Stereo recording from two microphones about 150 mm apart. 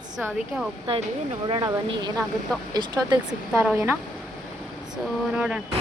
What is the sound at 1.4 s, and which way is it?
Speech, 30° right (ahead or behind).